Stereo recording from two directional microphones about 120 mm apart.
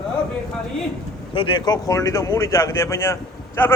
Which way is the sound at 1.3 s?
45° left (ahead or behind).